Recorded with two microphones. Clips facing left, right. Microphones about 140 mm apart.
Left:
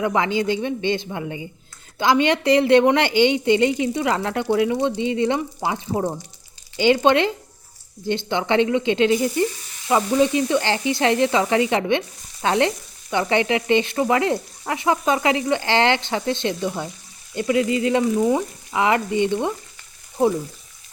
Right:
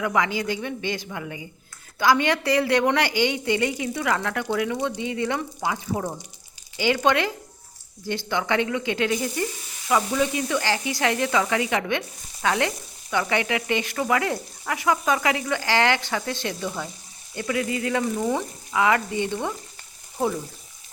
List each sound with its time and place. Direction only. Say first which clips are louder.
0.0 s sizzle: left 4 dB; 25° left (ahead or behind)
18.7 s sizzle: left 2 dB; 25° left (ahead or behind)